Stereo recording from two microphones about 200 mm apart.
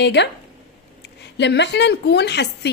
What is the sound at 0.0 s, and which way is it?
Speech, 60° left (ahead or behind).